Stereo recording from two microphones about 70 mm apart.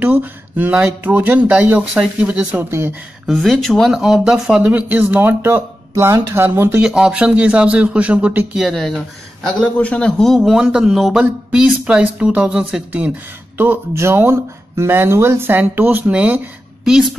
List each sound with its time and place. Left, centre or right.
0.0 s a man's voice: right
3.3 s a man's voice: centre
4.3 s a man's voice: centre
4.6 s speech: right
6.8 s a man's voice: centre
8.5 s a man's voice: centre
9.8 s a man's voice: centre
10.3 s a man's voice: centre
11.1 s a man's voice: centre
13.6 s speech: right
16.1 s a man's voice: centre
16.8 s a woman's voice: centre